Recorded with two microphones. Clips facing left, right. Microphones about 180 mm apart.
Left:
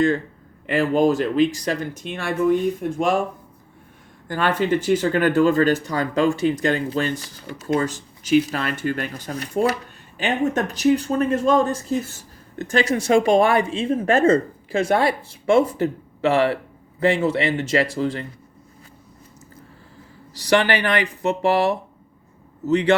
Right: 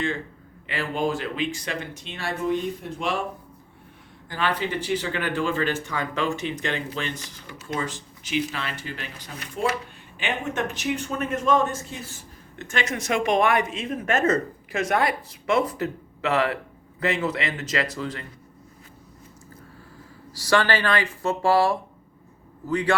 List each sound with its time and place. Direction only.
0.7 s speech: 45° left (ahead or behind)
4.3 s speech: 50° left (ahead or behind); by 18.3 s 30° left (ahead or behind)
20.3 s speech: 20° left (ahead or behind)